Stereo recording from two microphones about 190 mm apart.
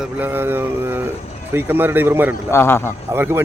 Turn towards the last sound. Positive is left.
turn(degrees=-10)  # may be behind; listen again after turning